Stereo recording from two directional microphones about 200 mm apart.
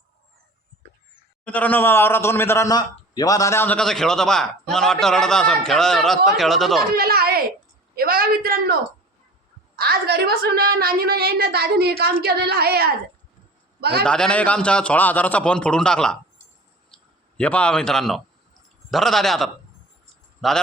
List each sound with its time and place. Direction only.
1.5 s a man's voice: 5° left (ahead or behind)
6.9 s a sound: 50° right (ahead or behind)
7.9 s a woman's voice: 50° right (ahead or behind)
9.7 s a woman's voice: 50° right (ahead or behind)
14.0 s a man's voice: 5° left (ahead or behind)
16.9 s a sound: 5° left (ahead or behind)
18.9 s a man's voice: centre (ahead or behind)